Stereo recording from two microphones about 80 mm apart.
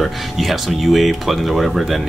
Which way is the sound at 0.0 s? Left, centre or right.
Centre.